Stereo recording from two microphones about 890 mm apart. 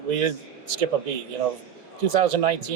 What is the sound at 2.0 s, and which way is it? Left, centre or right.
Speech, right.